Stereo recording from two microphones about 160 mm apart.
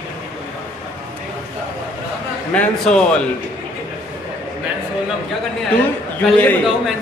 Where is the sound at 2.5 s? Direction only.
5° left (ahead or behind).